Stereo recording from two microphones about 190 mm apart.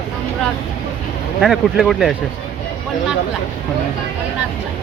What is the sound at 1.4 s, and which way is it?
Speech, centre (ahead or behind).